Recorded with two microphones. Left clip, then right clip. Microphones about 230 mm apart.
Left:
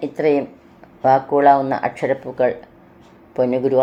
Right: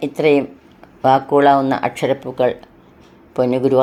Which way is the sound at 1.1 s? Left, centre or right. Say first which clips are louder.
Right 1 dB; right.